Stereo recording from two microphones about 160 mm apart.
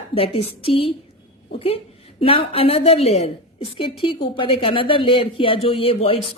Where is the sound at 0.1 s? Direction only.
35° left (ahead or behind).